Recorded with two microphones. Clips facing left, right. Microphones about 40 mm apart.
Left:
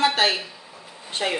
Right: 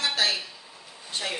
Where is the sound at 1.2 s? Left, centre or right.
Left.